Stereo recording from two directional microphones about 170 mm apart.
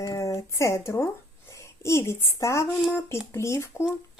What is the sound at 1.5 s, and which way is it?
A woman's voice, 15° left (ahead or behind).